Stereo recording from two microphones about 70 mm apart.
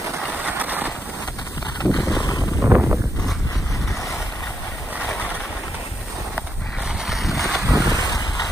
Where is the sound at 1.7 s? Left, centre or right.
Left.